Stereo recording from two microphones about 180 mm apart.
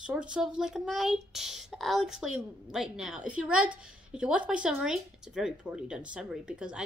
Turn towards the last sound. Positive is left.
turn(degrees=-5)  # may be behind; listen again after turning